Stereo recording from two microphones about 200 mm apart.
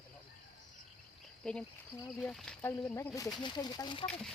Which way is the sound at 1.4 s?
5° left (ahead or behind).